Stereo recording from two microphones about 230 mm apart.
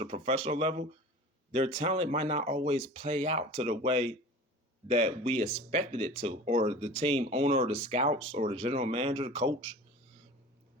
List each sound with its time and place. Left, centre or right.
0.0 s speech: right